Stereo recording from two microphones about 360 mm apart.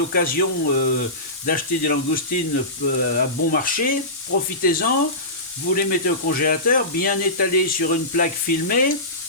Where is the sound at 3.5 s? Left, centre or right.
Left.